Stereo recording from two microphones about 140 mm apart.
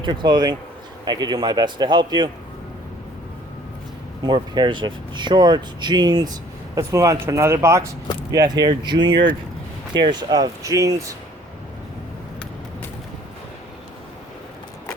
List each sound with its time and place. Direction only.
0.0 s speech: 35° right (ahead or behind)
4.3 s speech: 35° right (ahead or behind)
6.7 s speech: 20° right (ahead or behind)